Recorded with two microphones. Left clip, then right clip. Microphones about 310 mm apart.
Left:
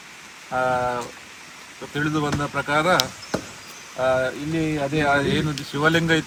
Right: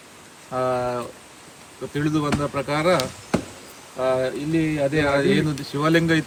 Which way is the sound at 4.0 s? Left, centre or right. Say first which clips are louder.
Left 1 dB; centre.